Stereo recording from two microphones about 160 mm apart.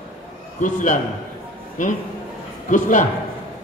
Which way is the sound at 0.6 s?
50° left (ahead or behind).